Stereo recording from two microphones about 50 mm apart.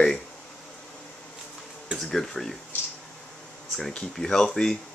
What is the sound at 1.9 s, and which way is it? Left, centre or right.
Speech, centre.